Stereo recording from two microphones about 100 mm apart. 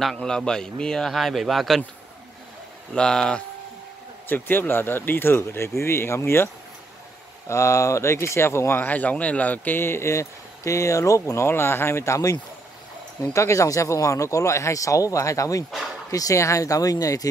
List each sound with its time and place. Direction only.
0.0 s a man's voice: 5° left (ahead or behind)
2.9 s speech: 5° left (ahead or behind)
4.3 s speech: 20° left (ahead or behind); by 17.3 s 35° left (ahead or behind)